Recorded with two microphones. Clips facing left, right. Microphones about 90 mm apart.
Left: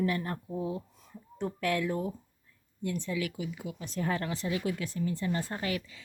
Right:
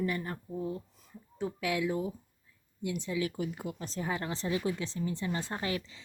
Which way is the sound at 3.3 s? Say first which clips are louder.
Right 2 dB; 45° right (ahead or behind).